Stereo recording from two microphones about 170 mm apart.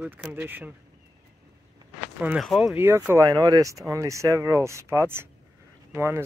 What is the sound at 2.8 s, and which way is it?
Speech, 15° right (ahead or behind).